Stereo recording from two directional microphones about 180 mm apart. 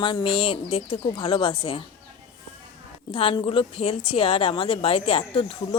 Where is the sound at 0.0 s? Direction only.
25° left (ahead or behind).